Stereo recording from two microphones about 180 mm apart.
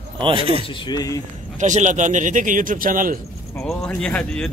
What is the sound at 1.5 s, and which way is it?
Speech, 45° right (ahead or behind).